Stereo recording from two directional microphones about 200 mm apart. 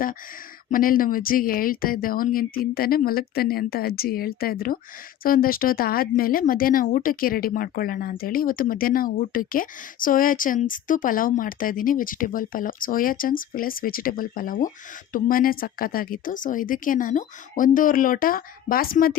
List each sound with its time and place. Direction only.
0.7 s speech: 45° left (ahead or behind)